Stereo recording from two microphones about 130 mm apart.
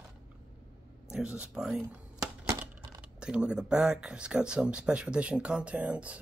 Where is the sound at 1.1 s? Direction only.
5° right (ahead or behind).